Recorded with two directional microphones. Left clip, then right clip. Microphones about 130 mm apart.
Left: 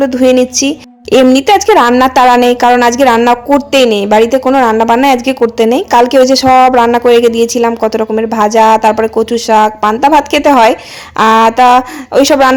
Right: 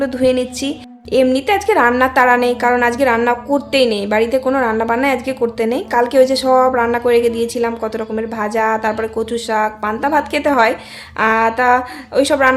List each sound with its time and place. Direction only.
0.0 s a woman's voice: 50° left (ahead or behind)
4.4 s a woman's voice: 40° left (ahead or behind)
11.2 s a woman's voice: 65° left (ahead or behind)